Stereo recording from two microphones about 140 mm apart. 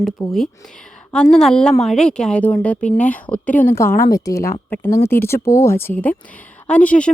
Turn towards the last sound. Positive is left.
turn(degrees=10)  # may be behind; listen again after turning